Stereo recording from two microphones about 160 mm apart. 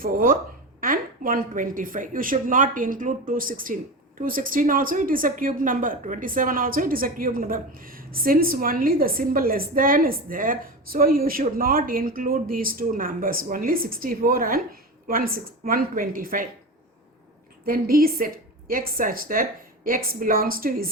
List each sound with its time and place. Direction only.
0.0 s a woman's voice: 60° right (ahead or behind)
17.7 s a woman's voice: 65° right (ahead or behind)